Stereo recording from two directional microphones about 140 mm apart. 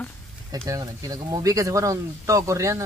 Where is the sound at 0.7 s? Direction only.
25° right (ahead or behind).